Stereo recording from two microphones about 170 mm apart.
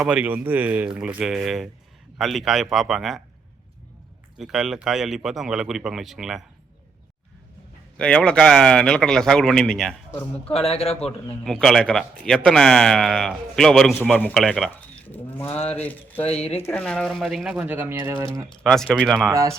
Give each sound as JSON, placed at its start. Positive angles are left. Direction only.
{"t": 0.0, "sound": "speech", "side_deg": -10}
{"t": 4.4, "sound": "speech", "side_deg": 0}
{"t": 7.9, "sound": "speech", "side_deg": 5}
{"t": 10.5, "sound": "speech", "side_deg": 35}
{"t": 11.4, "sound": "speech", "side_deg": 0}
{"t": 15.5, "sound": "speech", "side_deg": 35}
{"t": 15.8, "sound": "speech", "side_deg": 10}
{"t": 16.2, "sound": "speech", "side_deg": 35}
{"t": 16.6, "sound": "speech", "side_deg": 5}
{"t": 18.6, "sound": "speech", "side_deg": 5}
{"t": 19.3, "sound": "speech", "side_deg": -20}